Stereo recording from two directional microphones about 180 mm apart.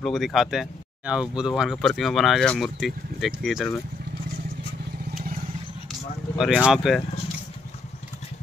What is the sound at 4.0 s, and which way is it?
Vehicle, 60° right (ahead or behind).